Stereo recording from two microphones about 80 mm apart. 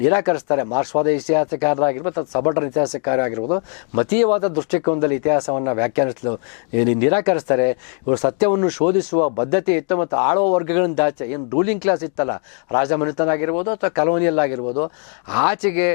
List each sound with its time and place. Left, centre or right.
0.0 s speech: centre